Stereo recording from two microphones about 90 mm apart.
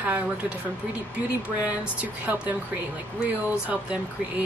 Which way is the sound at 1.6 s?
15° right (ahead or behind).